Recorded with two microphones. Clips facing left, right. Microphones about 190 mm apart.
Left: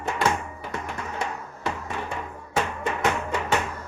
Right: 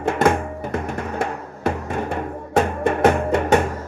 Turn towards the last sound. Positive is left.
turn(degrees=-50)  # may be behind; listen again after turning